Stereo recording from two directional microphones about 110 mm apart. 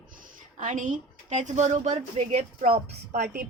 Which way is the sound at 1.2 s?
85° right.